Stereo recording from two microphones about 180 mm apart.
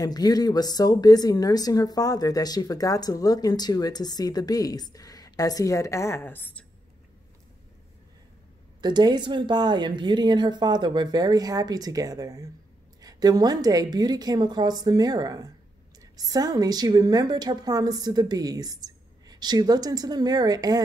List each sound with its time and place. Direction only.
0.0 s a woman's voice: 20° left (ahead or behind)
8.8 s a woman's voice: 25° right (ahead or behind)